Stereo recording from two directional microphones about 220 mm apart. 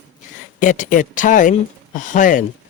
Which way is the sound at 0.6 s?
35° left (ahead or behind).